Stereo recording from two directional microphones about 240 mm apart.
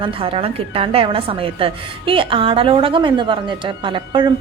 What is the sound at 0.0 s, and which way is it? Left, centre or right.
A woman's voice, right.